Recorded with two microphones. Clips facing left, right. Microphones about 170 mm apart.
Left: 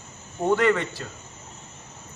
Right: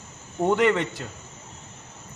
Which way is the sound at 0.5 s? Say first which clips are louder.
Even; 15° right (ahead or behind).